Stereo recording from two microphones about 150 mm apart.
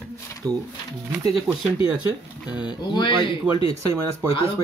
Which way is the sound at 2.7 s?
30° left (ahead or behind).